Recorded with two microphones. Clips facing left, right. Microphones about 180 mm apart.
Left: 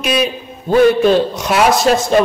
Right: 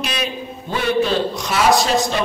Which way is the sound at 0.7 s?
50° left (ahead or behind).